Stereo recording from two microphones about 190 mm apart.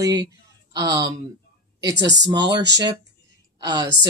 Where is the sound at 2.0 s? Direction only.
65° right (ahead or behind).